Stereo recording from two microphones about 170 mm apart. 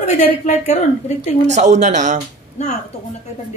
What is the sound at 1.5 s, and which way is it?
Speech, 45° right (ahead or behind).